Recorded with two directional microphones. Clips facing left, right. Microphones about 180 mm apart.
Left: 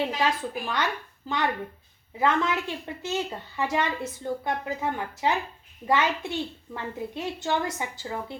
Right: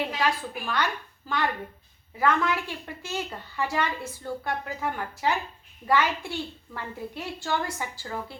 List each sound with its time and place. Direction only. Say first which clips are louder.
0.2 s a woman's voice: left 1 dB; 20° left (ahead or behind)